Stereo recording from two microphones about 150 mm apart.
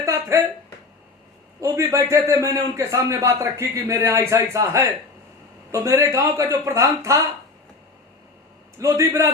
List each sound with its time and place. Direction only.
0.0 s a sound: 20° right (ahead or behind)
1.6 s a man's voice: 20° right (ahead or behind)
8.8 s a man's voice: 20° right (ahead or behind)